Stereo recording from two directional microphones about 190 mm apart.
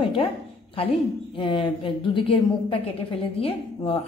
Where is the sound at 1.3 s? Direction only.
25° left (ahead or behind).